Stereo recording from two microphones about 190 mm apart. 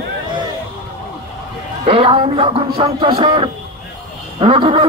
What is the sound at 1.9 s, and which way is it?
Speech, 30° right (ahead or behind).